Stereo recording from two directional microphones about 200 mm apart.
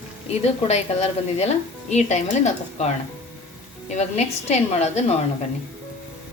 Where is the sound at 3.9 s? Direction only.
35° left (ahead or behind).